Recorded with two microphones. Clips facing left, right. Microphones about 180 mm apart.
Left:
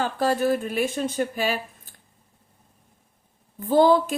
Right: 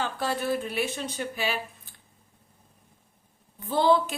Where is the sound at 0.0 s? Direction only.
45° left (ahead or behind).